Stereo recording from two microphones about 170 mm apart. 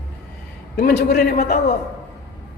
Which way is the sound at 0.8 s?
65° left (ahead or behind).